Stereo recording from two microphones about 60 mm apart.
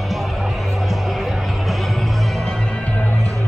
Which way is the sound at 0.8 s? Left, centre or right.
Centre.